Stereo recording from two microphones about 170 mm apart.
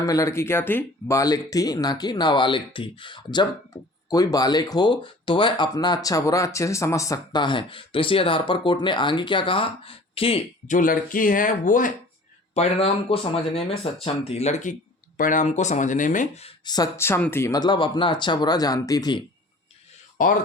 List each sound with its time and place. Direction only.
0.0 s speech: 20° left (ahead or behind)
10.7 s speech: 50° left (ahead or behind)
12.5 s speech: 35° left (ahead or behind)
16.6 s speech: 20° left (ahead or behind)
20.2 s speech: 55° left (ahead or behind)